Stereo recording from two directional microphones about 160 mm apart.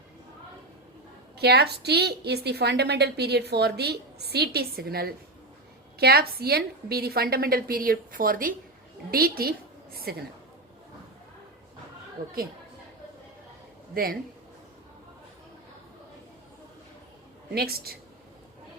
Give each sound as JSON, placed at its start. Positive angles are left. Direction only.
{"t": 1.4, "sound": "a woman's voice", "side_deg": -90}
{"t": 13.9, "sound": "a woman's voice", "side_deg": -65}
{"t": 17.5, "sound": "a woman's voice", "side_deg": -75}